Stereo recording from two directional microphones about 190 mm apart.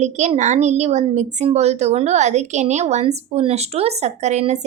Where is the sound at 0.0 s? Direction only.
40° right (ahead or behind).